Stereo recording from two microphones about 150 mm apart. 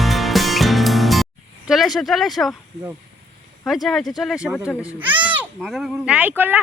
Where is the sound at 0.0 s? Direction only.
Centre (ahead or behind).